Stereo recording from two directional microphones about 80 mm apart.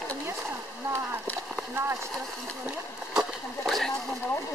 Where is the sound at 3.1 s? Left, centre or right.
Centre.